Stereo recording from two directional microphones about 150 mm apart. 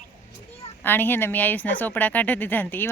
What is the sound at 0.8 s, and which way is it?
Speech, 15° left (ahead or behind).